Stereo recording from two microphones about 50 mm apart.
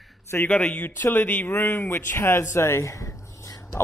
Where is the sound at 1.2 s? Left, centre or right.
Left.